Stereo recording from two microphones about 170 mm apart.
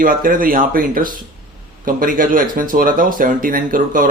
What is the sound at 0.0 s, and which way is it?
Speech, 55° right (ahead or behind).